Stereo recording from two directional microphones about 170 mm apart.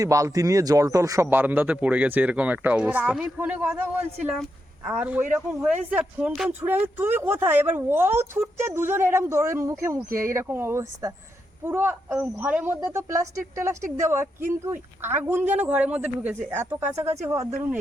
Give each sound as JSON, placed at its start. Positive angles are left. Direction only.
{"t": 0.0, "sound": "a man's voice", "side_deg": -20}